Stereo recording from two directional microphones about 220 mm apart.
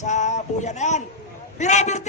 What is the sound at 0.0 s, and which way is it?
A man's voice, 35° left (ahead or behind).